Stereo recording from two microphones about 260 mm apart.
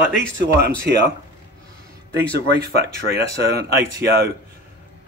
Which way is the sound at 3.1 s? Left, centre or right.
Right.